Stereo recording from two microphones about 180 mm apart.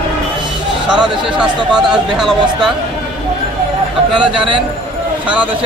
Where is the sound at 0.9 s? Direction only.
5° right (ahead or behind).